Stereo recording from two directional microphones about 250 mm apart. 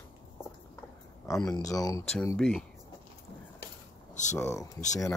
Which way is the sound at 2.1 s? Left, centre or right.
Centre.